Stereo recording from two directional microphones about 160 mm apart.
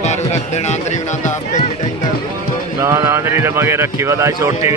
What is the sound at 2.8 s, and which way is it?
Speech, 15° right (ahead or behind).